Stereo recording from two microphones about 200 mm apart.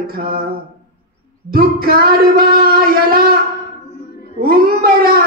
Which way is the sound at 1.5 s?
50° right (ahead or behind).